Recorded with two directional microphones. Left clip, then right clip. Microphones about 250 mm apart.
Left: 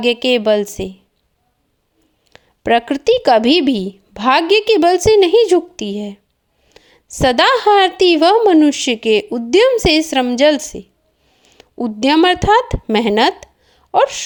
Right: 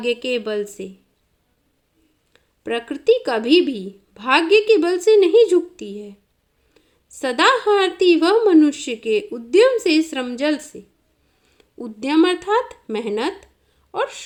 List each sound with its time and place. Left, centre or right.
0.0 s a woman's voice: left
2.3 s a woman's voice: left